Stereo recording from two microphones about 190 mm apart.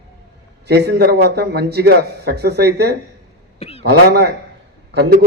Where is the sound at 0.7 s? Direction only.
60° right (ahead or behind).